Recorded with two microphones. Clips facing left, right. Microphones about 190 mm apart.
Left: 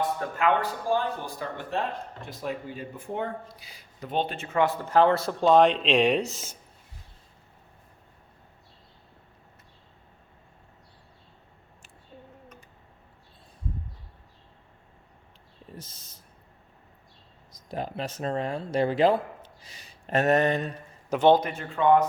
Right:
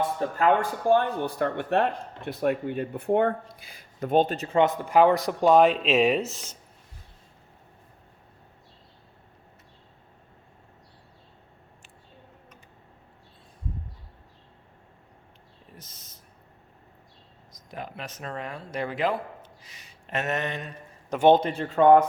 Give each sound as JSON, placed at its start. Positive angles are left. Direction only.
{"t": 0.2, "sound": "speech", "side_deg": -40}
{"t": 4.5, "sound": "speech", "side_deg": -20}
{"t": 15.8, "sound": "a sound", "side_deg": 30}
{"t": 17.7, "sound": "speech", "side_deg": 30}
{"t": 21.2, "sound": "speech", "side_deg": -15}
{"t": 21.4, "sound": "speech", "side_deg": -35}
{"t": 21.8, "sound": "speech", "side_deg": -50}